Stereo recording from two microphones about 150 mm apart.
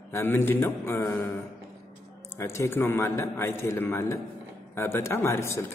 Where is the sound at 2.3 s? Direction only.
15° left (ahead or behind).